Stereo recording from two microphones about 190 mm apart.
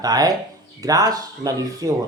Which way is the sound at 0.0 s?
20° right (ahead or behind).